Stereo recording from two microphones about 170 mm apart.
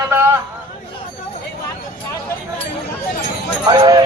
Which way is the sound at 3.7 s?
25° right (ahead or behind).